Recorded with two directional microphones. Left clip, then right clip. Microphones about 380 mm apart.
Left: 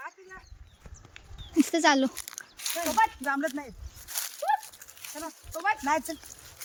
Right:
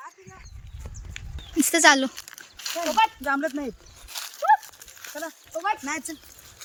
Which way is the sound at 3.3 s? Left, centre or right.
Centre.